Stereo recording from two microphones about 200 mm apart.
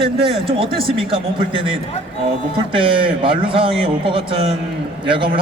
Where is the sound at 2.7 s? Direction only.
25° right (ahead or behind).